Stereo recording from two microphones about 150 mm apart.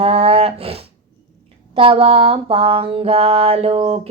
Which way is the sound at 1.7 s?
35° right (ahead or behind).